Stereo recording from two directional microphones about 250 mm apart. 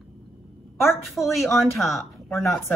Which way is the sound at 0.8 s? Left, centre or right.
Centre.